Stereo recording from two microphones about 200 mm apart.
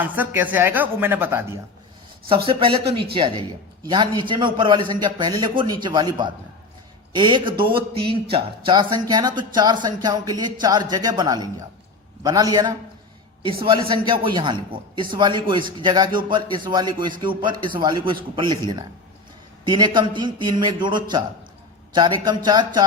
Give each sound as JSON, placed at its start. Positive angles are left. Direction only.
{"t": 0.0, "sound": "a woman's voice", "side_deg": -10}
{"t": 2.3, "sound": "speech", "side_deg": -25}
{"t": 7.6, "sound": "speech", "side_deg": -50}
{"t": 8.0, "sound": "speech", "side_deg": -25}
{"t": 19.6, "sound": "speech", "side_deg": -20}